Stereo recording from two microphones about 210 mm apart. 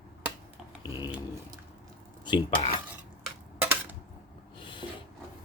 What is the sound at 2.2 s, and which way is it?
Speech, 25° left (ahead or behind).